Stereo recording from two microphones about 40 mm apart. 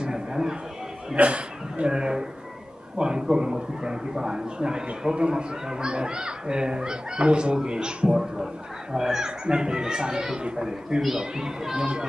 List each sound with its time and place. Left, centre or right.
0.0 s a sound: centre
1.1 s speech: right
1.9 s speech: centre
11.0 s speech: centre